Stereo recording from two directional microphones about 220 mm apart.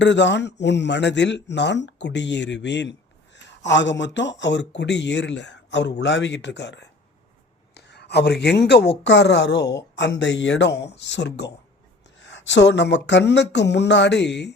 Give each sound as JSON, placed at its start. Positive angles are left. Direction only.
{"t": 0.0, "sound": "speech", "side_deg": 55}